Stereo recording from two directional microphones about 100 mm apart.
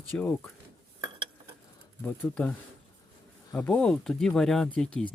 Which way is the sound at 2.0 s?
15° left (ahead or behind).